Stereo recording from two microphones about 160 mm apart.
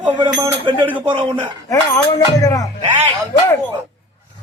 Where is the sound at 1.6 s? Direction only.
20° left (ahead or behind).